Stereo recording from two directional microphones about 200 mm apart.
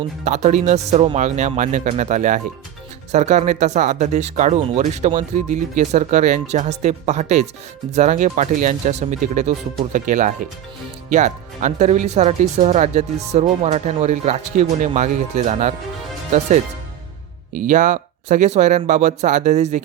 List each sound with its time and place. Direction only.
0.3 s speech: 35° right (ahead or behind)
17.5 s speech: 40° right (ahead or behind)